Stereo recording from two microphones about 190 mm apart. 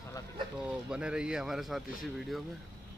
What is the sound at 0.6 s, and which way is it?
Speech, 5° right (ahead or behind).